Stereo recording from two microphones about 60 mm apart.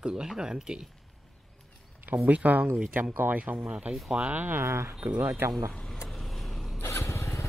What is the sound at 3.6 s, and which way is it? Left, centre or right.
Speech, centre.